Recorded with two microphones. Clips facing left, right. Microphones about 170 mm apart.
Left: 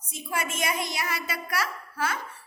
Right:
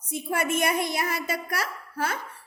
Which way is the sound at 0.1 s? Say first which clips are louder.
Right 6 dB; 60° right (ahead or behind).